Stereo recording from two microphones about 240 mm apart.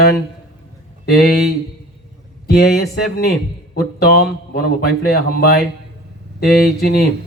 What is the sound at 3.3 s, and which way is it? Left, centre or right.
A man's voice, left.